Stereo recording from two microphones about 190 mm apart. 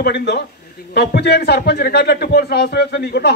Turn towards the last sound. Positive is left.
turn(degrees=60)  # may be behind; listen again after turning